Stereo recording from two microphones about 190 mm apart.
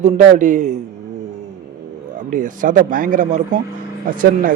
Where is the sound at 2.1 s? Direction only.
45° right (ahead or behind).